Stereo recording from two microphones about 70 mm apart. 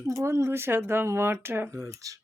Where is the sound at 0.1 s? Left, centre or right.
Right.